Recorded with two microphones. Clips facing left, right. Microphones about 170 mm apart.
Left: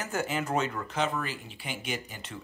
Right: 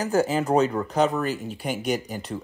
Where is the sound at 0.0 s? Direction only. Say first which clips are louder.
Right 9 dB; 35° right (ahead or behind).